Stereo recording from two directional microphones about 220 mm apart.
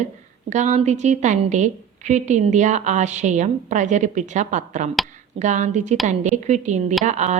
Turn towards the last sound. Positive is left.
turn(degrees=-35)  # may be behind; listen again after turning